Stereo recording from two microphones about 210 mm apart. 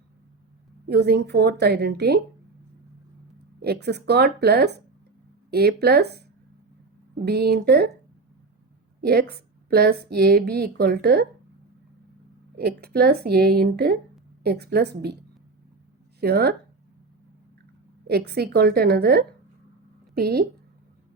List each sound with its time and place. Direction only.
0.9 s speech: 50° right (ahead or behind)
3.6 s speech: 50° right (ahead or behind)
7.3 s speech: 50° right (ahead or behind)
9.0 s a woman's voice: 50° right (ahead or behind)
12.5 s speech: 45° right (ahead or behind)
16.2 s speech: 50° right (ahead or behind)
18.1 s speech: 50° right (ahead or behind)